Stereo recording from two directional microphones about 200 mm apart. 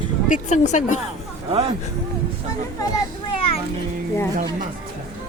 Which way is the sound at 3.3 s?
30° left (ahead or behind).